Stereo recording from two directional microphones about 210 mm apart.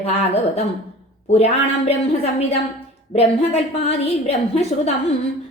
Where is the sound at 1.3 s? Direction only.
30° left (ahead or behind).